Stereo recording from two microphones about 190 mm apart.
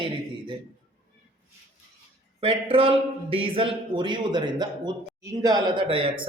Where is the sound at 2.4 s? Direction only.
30° right (ahead or behind).